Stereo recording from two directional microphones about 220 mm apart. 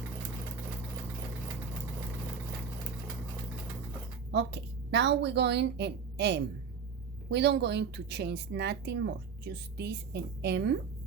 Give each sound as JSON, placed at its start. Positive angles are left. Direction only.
{"t": 4.3, "sound": "a woman's voice", "side_deg": -50}